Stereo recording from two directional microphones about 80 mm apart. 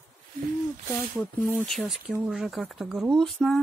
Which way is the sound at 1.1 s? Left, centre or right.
Left.